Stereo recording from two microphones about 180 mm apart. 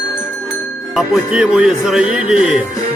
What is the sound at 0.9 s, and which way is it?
Speech, 5° right (ahead or behind).